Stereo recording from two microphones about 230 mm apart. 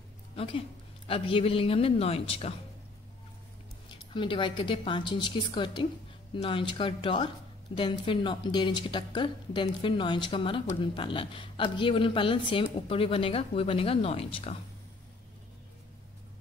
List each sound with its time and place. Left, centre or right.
0.4 s speech: left
4.1 s speech: left